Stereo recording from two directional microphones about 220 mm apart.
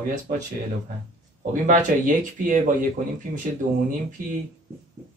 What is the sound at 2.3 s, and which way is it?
Speech, 35° right (ahead or behind).